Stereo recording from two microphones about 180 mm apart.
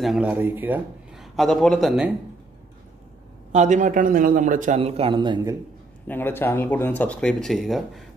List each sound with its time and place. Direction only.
0.0 s a man's voice: 5° right (ahead or behind)
3.5 s a man's voice: 40° right (ahead or behind)
4.7 s a man's voice: 35° right (ahead or behind)
6.0 s speech: 10° left (ahead or behind)